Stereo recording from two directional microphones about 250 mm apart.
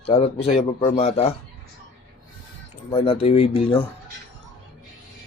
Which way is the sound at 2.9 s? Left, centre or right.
Left.